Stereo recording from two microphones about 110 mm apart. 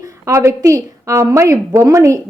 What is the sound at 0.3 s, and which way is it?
A woman's voice, 30° right (ahead or behind).